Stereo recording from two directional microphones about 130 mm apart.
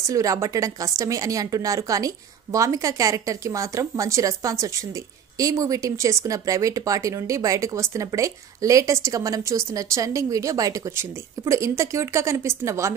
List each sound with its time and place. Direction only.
0.0 s speech: 25° right (ahead or behind)